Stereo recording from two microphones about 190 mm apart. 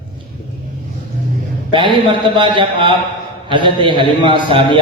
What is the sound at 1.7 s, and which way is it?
A man's voice, 25° right (ahead or behind).